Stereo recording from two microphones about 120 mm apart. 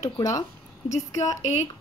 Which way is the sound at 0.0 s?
30° left (ahead or behind).